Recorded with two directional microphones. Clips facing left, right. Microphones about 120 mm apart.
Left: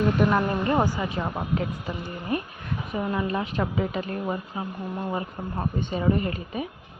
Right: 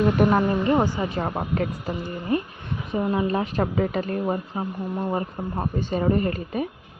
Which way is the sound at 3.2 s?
40° right (ahead or behind).